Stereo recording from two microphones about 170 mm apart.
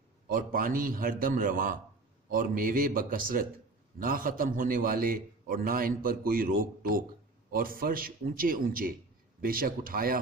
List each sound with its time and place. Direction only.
0.3 s a man's voice: 55° right (ahead or behind)